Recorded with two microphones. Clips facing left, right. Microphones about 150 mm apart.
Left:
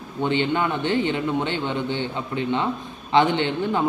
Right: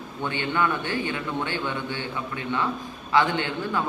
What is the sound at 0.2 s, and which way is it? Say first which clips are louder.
A man's voice: left 4 dB; 20° left (ahead or behind).